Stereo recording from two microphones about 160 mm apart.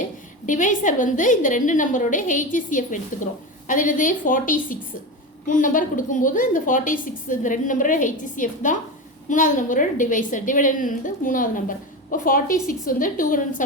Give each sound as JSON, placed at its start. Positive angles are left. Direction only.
{"t": 0.0, "sound": "a woman's voice", "side_deg": 55}